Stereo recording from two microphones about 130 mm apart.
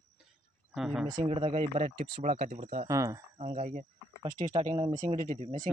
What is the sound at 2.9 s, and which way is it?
Speech, 25° right (ahead or behind).